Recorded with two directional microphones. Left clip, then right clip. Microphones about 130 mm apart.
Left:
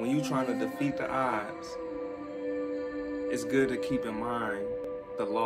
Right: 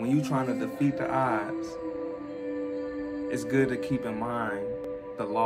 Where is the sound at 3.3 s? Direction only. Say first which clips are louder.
Right 2 dB; 25° right (ahead or behind).